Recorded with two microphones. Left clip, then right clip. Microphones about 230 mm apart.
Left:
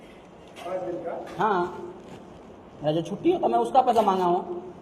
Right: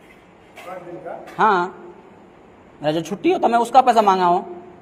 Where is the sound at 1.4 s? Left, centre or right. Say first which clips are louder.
Right 8 dB; right.